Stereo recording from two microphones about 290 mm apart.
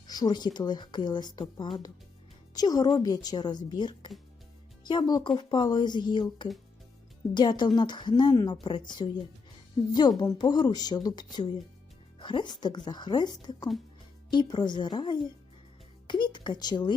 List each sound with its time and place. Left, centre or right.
0.1 s a woman's voice: centre